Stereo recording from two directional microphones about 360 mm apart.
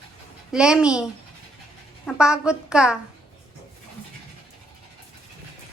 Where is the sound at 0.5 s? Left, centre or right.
Centre.